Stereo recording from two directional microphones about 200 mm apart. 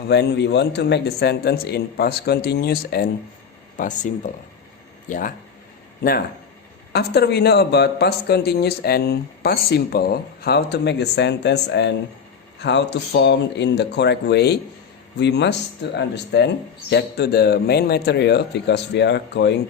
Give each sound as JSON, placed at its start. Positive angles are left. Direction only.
{"t": 0.1, "sound": "speech", "side_deg": 55}
{"t": 3.8, "sound": "speech", "side_deg": 40}